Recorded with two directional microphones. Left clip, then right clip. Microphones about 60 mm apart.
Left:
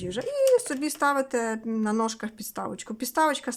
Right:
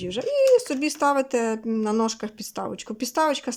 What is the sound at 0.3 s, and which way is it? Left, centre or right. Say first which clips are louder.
Speech: right 4 dB; right.